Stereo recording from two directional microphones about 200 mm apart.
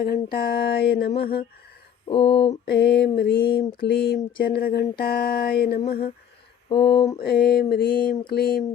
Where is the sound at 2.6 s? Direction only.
55° left (ahead or behind).